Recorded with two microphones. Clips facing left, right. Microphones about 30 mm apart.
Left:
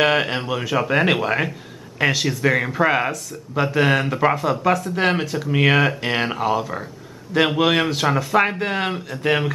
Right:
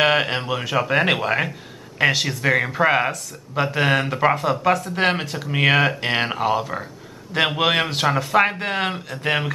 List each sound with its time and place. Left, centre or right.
0.0 s speech: centre